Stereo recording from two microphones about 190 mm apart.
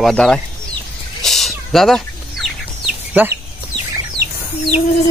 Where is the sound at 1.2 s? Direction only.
Centre (ahead or behind).